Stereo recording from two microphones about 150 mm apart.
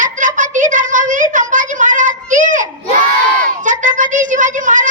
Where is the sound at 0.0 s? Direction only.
60° right (ahead or behind).